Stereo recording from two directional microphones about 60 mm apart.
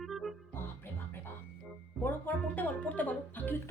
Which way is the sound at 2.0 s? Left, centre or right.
Left.